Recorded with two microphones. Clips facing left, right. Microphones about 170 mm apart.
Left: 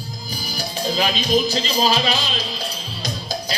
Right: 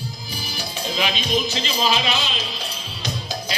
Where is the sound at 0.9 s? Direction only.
35° left (ahead or behind).